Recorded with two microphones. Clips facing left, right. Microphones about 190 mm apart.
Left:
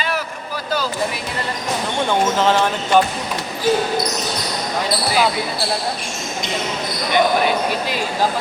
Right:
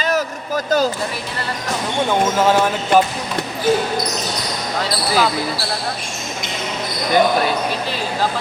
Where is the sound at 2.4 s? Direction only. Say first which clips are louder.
Right 1 dB; 10° right (ahead or behind).